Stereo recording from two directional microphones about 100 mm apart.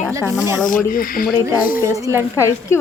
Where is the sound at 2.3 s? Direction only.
30° left (ahead or behind).